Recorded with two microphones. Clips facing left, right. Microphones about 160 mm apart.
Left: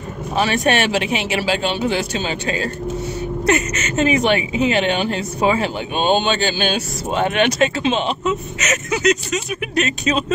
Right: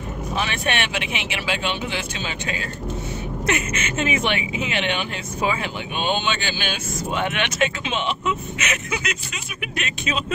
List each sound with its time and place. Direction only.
0.4 s a woman's voice: 40° left (ahead or behind)